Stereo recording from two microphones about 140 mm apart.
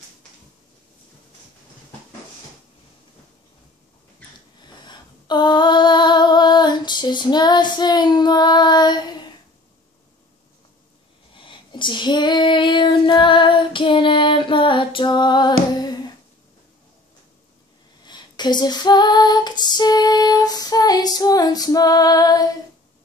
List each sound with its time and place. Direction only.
4.6 s female singing: 30° left (ahead or behind)
11.3 s child singing: 35° left (ahead or behind)
18.0 s female singing: 30° left (ahead or behind)